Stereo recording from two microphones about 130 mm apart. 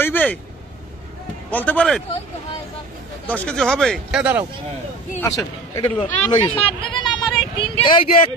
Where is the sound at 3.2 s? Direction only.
10° left (ahead or behind).